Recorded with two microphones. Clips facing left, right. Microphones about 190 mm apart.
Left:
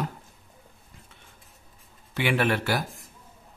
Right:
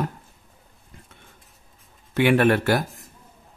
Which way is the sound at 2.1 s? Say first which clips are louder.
Right 7 dB; 50° right (ahead or behind).